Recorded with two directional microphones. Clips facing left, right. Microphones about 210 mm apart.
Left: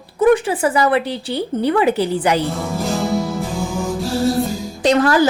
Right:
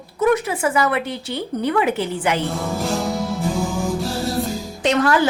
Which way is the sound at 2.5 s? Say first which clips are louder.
Left 1 dB; centre (ahead or behind).